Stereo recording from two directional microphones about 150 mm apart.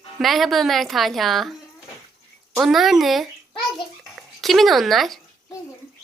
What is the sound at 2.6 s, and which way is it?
A child's voice, centre (ahead or behind).